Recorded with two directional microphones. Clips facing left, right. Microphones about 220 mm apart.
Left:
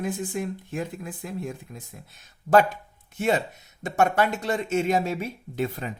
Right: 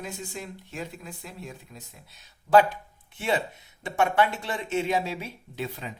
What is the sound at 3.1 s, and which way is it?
A woman's voice, 45° left (ahead or behind).